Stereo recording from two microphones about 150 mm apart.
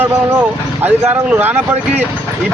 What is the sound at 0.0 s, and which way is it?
Speech, 15° right (ahead or behind).